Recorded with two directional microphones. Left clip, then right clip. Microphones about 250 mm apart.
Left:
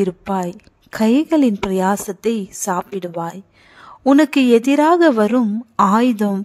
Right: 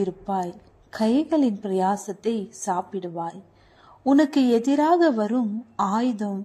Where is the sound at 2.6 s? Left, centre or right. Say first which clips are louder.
Left 5 dB; left.